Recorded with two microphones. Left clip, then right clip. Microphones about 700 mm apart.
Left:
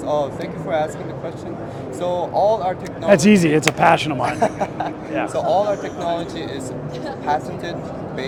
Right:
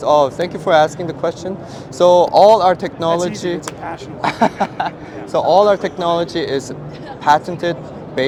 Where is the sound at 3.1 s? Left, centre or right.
Left.